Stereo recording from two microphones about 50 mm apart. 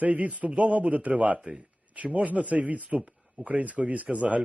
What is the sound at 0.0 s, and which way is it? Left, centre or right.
A man's voice, right.